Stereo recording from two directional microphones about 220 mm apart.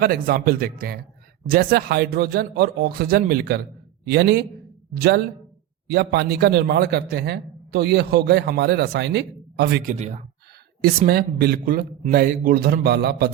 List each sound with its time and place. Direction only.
0.0 s a man's voice: 40° right (ahead or behind)
9.9 s speech: 35° right (ahead or behind)
10.8 s a man's voice: 45° right (ahead or behind)